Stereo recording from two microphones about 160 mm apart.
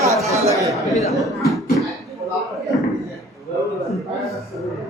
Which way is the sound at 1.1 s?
Centre (ahead or behind).